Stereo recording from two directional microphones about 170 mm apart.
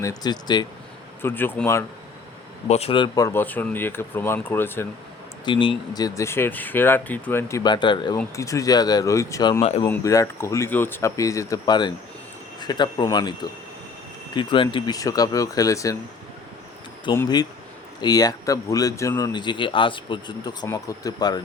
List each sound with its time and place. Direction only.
0.0 s speech: 20° left (ahead or behind)
1.2 s speech: 10° left (ahead or behind)
2.6 s speech: 40° left (ahead or behind); by 4.9 s 10° left (ahead or behind)
5.5 s speech: 30° left (ahead or behind)
9.8 s speech: 15° left (ahead or behind)
14.3 s speech: 30° left (ahead or behind)
17.1 s speech: 30° left (ahead or behind)